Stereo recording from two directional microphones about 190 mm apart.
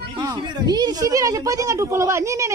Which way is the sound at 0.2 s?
20° right (ahead or behind).